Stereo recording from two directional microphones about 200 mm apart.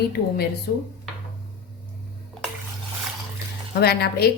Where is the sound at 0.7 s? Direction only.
55° left (ahead or behind).